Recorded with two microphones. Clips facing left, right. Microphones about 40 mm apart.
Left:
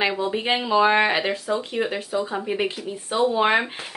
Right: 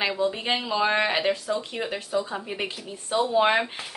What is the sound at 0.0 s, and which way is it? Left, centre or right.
Speech, centre.